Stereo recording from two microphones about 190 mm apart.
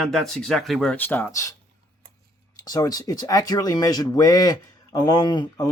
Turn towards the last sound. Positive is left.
turn(degrees=20)  # may be behind; listen again after turning